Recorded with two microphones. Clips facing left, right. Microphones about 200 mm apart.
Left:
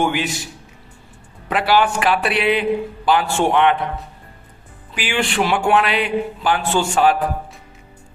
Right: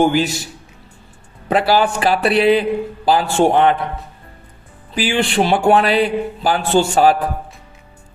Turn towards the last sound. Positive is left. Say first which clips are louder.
# right 3 dB
turn(degrees=-35)  # may be behind; listen again after turning